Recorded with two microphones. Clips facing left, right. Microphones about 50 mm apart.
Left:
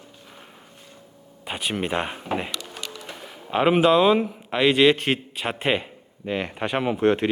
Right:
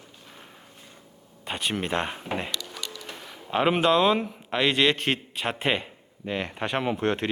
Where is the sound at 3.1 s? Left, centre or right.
Centre.